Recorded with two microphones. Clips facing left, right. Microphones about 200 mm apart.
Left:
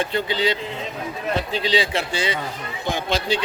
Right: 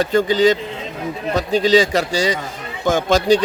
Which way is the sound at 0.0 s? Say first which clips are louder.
Right 8 dB; 45° right (ahead or behind).